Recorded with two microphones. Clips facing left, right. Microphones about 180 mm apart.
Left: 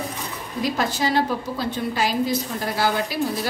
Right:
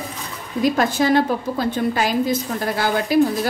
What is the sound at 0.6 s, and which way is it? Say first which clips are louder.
A woman's voice: right 6 dB; 50° right (ahead or behind).